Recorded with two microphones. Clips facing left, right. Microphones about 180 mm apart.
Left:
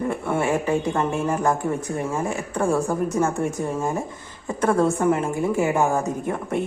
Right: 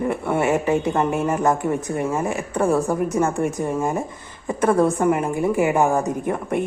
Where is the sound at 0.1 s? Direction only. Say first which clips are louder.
Right 2 dB; 20° right (ahead or behind).